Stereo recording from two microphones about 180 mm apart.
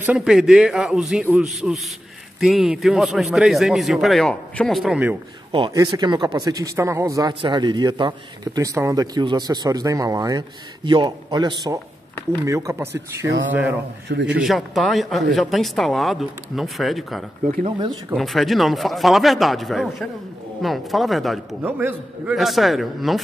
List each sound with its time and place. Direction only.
0.0 s speech: 5° right (ahead or behind)
5.5 s a man's voice: 25° right (ahead or behind)
14.0 s a man's voice: 75° right (ahead or behind)
14.4 s speech: centre (ahead or behind)
17.6 s speech: 30° right (ahead or behind)
18.1 s speech: centre (ahead or behind)
21.6 s speech: 10° right (ahead or behind)
22.3 s speech: centre (ahead or behind)